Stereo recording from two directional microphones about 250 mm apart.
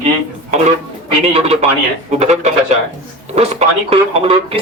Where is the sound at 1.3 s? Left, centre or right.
Right.